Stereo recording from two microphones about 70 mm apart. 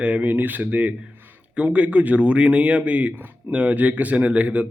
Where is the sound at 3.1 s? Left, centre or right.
Right.